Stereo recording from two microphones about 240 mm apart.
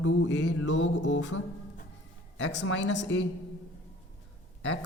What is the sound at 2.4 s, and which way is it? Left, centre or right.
Mantra, left.